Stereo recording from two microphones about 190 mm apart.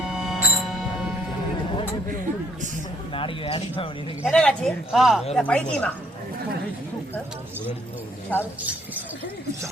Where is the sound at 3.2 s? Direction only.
30° left (ahead or behind).